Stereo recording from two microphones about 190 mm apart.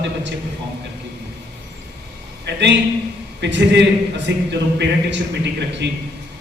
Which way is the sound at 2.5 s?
65° right (ahead or behind).